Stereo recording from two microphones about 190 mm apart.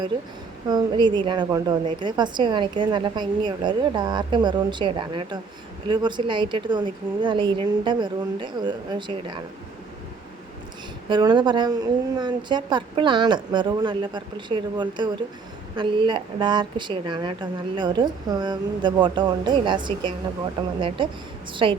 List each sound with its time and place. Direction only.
0.7 s a woman's voice: 20° right (ahead or behind)
11.1 s a woman's voice: 25° right (ahead or behind)